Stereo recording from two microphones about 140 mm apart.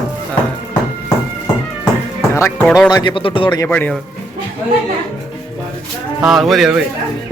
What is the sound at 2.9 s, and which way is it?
Speech, 30° left (ahead or behind).